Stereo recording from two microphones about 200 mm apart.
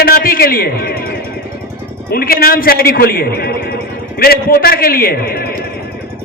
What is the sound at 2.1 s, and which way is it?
A man's voice, 50° left (ahead or behind).